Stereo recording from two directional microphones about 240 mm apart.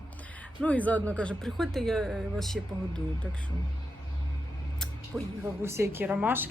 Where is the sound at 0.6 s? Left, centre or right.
Centre.